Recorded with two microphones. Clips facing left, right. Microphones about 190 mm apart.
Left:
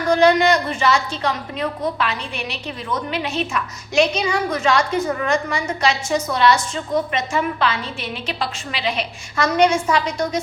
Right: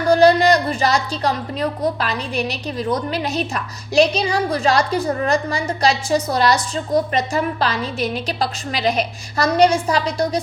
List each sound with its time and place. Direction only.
0.1 s a woman's voice: 35° right (ahead or behind)